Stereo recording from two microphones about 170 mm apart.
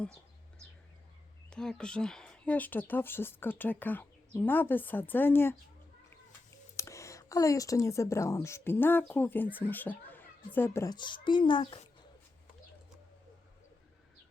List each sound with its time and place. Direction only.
1.5 s speech: 5° left (ahead or behind)
6.7 s a woman's voice: 15° left (ahead or behind)
10.9 s a child's voice: 25° left (ahead or behind)